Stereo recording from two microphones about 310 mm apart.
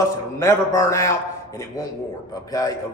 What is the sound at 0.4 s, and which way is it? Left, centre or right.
Speech, centre.